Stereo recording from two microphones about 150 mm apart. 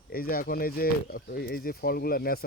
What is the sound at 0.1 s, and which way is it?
Speech, 80° left.